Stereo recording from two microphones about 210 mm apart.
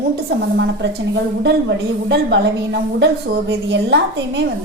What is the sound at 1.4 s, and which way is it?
A woman's voice, 55° right (ahead or behind).